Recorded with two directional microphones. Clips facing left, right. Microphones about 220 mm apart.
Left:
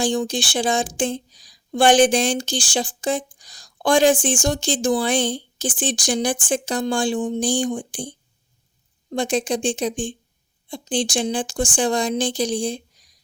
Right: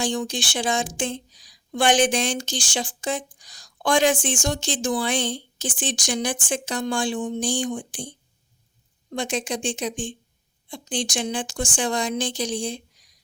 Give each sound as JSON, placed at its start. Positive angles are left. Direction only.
{"t": 0.0, "sound": "speech", "side_deg": 35}